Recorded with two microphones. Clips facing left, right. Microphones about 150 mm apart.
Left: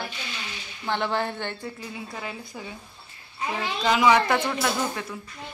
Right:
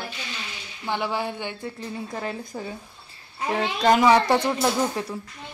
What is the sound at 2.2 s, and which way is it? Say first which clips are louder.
Speech: right 5 dB; 40° right (ahead or behind).